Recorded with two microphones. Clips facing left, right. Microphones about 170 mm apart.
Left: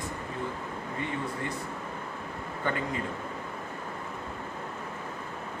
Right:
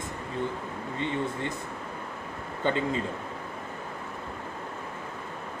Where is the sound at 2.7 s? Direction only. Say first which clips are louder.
Right 5 dB; 25° right (ahead or behind).